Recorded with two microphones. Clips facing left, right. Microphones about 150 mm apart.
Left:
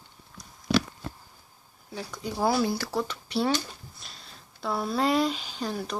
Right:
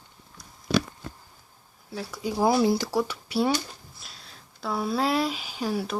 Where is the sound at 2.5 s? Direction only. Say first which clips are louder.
Right 4 dB; 20° right (ahead or behind).